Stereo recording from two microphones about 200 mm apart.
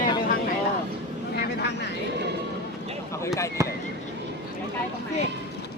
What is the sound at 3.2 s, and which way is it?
Speech, 15° left (ahead or behind).